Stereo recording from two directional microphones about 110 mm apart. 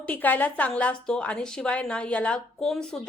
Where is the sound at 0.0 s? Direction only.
15° left (ahead or behind).